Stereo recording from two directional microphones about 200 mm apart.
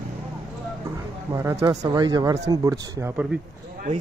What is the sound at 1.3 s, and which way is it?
Speech, 15° right (ahead or behind).